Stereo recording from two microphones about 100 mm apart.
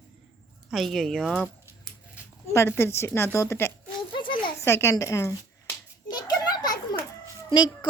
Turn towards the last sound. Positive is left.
turn(degrees=45)  # may be behind; listen again after turning